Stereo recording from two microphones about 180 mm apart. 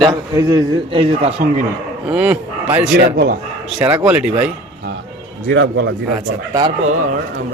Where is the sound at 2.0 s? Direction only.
5° right (ahead or behind).